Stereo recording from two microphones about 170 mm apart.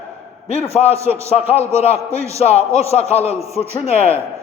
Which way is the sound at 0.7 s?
35° left (ahead or behind).